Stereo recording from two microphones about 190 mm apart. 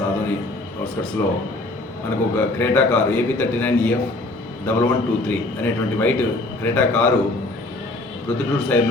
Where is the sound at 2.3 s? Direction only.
10° left (ahead or behind).